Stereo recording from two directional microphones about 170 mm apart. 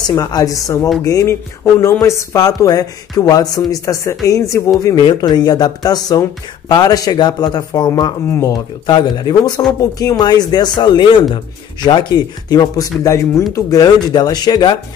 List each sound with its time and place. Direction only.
0.0 s speech: 20° left (ahead or behind)